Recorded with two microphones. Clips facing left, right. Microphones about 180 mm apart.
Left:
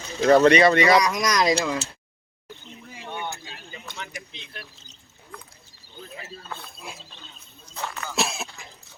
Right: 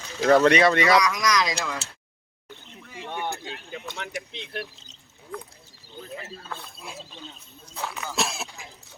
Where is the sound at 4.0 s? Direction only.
65° right (ahead or behind).